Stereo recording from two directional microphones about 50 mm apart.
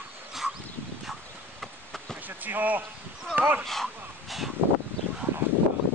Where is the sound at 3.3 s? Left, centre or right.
Right.